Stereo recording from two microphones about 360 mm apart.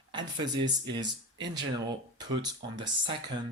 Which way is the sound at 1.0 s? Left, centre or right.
Right.